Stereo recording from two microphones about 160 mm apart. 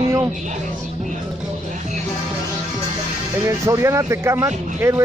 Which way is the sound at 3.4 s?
15° right (ahead or behind).